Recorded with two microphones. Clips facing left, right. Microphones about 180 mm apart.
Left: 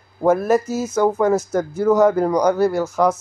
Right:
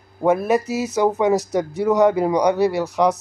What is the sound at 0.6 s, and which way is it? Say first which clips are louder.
Speech: even; 70° right (ahead or behind).